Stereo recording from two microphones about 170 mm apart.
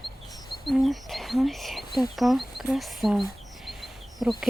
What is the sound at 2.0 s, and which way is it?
Speech, centre (ahead or behind).